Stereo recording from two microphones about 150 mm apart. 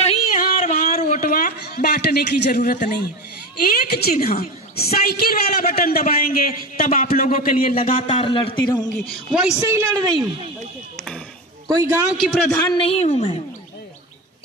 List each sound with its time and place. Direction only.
0.0 s a sound: 50° left (ahead or behind)
3.5 s a woman's voice: 90° left; by 7.7 s 70° left (ahead or behind)
8.1 s a woman's voice: 35° left (ahead or behind)
9.3 s a woman's voice: 5° right (ahead or behind)
9.7 s a woman's voice: 20° right (ahead or behind)
11.6 s a woman's voice: 20° right (ahead or behind)
12.1 s a woman's voice: 5° right (ahead or behind)
12.7 s a woman's voice: 40° left (ahead or behind)